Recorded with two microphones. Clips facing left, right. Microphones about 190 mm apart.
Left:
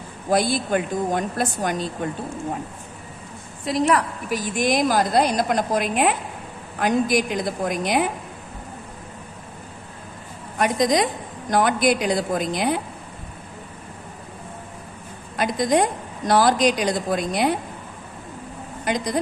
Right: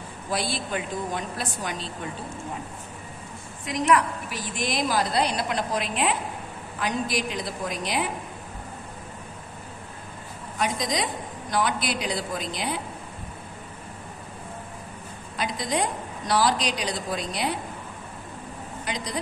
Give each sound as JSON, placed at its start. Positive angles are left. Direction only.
{"t": 0.3, "sound": "a woman's voice", "side_deg": 45}
{"t": 3.6, "sound": "a woman's voice", "side_deg": 35}
{"t": 4.6, "sound": "a woman's voice", "side_deg": 50}
{"t": 10.6, "sound": "a woman's voice", "side_deg": 50}
{"t": 15.3, "sound": "a woman's voice", "side_deg": 50}
{"t": 18.9, "sound": "a woman's voice", "side_deg": 50}